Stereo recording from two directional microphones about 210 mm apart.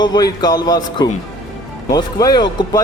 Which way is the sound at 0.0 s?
20° left (ahead or behind).